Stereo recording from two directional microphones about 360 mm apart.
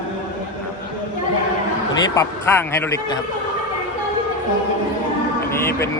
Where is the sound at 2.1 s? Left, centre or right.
Centre.